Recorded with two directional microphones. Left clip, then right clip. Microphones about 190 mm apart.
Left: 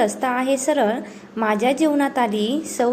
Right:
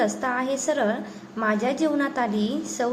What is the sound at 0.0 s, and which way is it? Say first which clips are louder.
A woman's voice: left 4 dB; 25° left (ahead or behind).